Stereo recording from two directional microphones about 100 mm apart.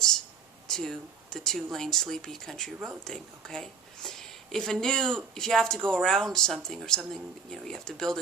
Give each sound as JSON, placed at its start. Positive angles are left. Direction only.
{"t": 0.7, "sound": "a woman's voice", "side_deg": 5}